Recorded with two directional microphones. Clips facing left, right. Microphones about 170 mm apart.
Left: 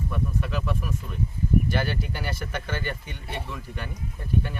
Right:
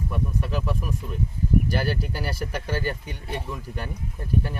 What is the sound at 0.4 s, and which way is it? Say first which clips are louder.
Speech: right 1 dB; 40° right (ahead or behind).